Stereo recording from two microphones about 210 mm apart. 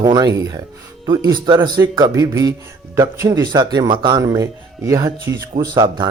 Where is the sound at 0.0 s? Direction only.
20° right (ahead or behind).